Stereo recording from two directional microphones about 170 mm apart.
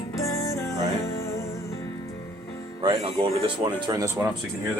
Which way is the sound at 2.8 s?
30° right (ahead or behind).